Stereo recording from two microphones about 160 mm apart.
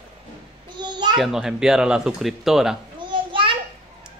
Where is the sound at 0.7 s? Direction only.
25° right (ahead or behind).